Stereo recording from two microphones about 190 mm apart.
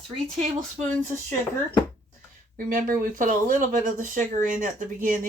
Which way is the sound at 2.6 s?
45° right (ahead or behind).